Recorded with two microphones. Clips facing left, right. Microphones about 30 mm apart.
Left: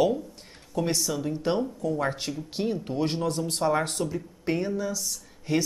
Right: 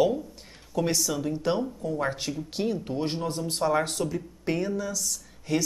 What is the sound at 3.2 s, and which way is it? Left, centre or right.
Speech, left.